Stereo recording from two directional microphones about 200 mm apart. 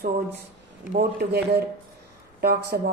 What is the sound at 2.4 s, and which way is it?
Speech, 50° right (ahead or behind).